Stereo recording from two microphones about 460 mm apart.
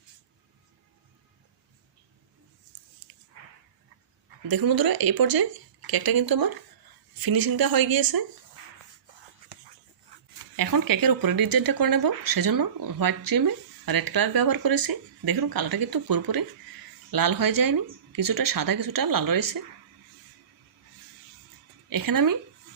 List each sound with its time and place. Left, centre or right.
4.4 s speech: right
10.6 s speech: right
21.8 s speech: right